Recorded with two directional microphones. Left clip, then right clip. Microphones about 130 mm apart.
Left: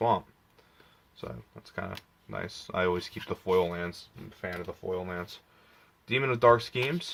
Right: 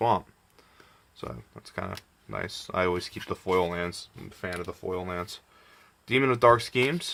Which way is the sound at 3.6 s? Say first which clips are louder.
Right 3 dB; 45° right (ahead or behind).